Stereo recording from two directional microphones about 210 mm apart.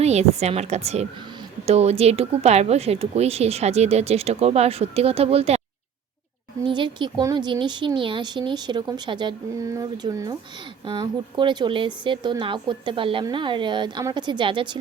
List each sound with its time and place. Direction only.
0.0 s a woman's voice: 30° right (ahead or behind)
6.7 s speech: 20° right (ahead or behind)